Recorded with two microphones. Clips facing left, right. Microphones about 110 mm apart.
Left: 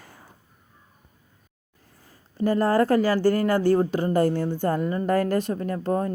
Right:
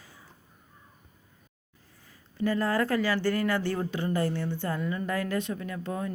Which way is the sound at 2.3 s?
40° left (ahead or behind).